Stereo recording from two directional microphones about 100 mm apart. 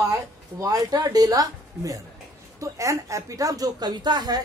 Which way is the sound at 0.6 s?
40° right (ahead or behind).